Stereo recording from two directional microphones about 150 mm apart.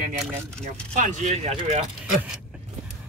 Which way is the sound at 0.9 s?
55° right (ahead or behind).